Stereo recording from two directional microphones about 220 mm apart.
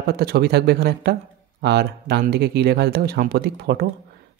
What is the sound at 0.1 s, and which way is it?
Speech, 45° right (ahead or behind).